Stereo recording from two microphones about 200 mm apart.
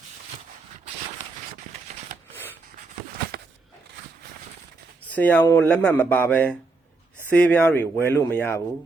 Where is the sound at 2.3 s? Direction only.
10° left (ahead or behind).